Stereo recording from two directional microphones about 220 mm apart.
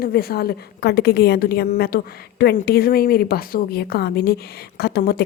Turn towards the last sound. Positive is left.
turn(degrees=45)  # may be behind; listen again after turning